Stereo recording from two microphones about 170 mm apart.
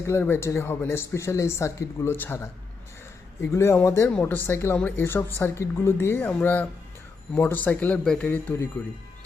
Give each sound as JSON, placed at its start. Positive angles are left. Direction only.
{"t": 0.1, "sound": "speech", "side_deg": 15}